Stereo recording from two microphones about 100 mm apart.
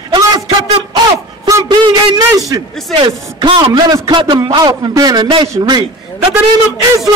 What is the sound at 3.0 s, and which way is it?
A man's voice, 50° right (ahead or behind).